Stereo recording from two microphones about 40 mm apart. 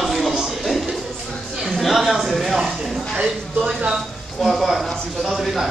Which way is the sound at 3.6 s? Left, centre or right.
Right.